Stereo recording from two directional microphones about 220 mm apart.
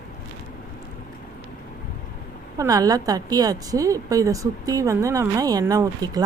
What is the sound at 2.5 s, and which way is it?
A woman's voice, 15° right (ahead or behind).